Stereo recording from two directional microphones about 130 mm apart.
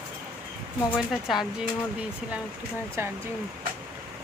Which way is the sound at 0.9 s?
Centre (ahead or behind).